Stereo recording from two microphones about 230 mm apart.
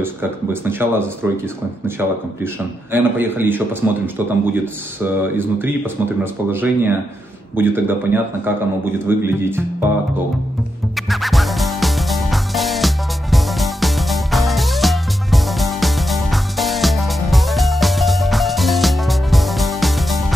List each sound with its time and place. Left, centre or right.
0.0 s a man's voice: centre
11.0 s music: centre